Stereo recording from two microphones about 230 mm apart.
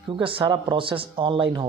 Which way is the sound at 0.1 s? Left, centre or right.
Right.